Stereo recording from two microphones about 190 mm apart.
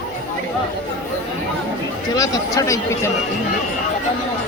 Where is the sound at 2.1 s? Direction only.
15° left (ahead or behind).